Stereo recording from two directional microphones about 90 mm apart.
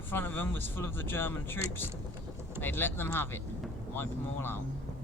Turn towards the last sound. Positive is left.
turn(degrees=25)  # may be behind; listen again after turning